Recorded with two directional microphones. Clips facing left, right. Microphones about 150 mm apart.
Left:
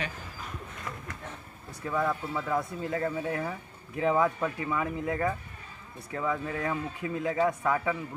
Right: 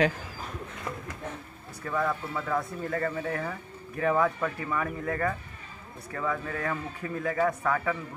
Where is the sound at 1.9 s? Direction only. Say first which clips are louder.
Even; 5° left (ahead or behind).